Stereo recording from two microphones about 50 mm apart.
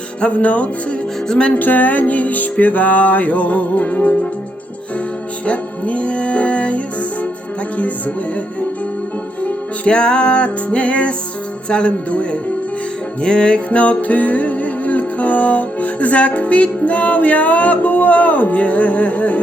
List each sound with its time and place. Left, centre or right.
0.2 s speech: left
1.3 s music: centre
1.5 s music: left
5.5 s music: left
9.4 s music: left
11.7 s speech: left
13.2 s music: centre